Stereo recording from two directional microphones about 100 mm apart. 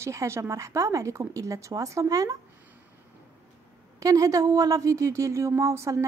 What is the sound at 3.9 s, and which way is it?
Speech, 35° right (ahead or behind).